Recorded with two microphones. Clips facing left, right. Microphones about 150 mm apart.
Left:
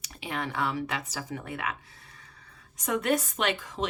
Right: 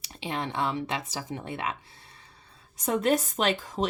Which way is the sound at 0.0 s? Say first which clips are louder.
Right 1 dB; 30° right (ahead or behind).